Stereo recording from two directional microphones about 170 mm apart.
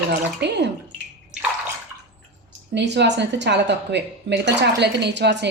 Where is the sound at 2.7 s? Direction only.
90° right.